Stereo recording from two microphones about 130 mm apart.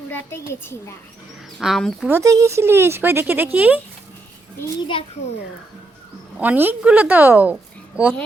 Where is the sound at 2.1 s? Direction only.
25° right (ahead or behind).